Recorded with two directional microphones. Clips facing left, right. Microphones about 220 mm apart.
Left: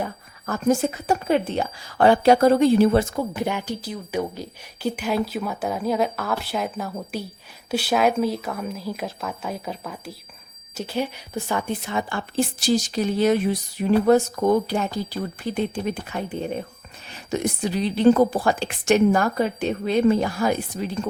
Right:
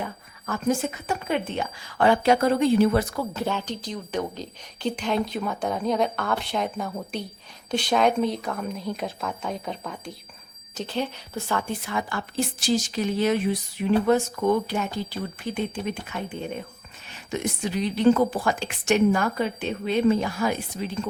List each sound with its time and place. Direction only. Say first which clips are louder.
0.0 s a woman's voice: left 4 dB; 40° left (ahead or behind)
17.3 s a woman's voice: left 3 dB; 40° left (ahead or behind)